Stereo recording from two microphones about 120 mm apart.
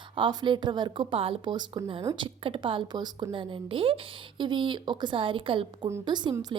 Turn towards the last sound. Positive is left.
turn(degrees=-35)  # may be behind; listen again after turning